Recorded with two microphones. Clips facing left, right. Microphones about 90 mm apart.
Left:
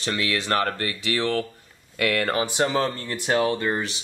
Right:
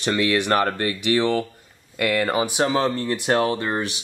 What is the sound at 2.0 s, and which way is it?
Speech, 5° right (ahead or behind).